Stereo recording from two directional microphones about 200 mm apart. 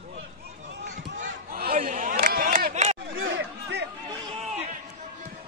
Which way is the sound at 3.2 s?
65° right (ahead or behind).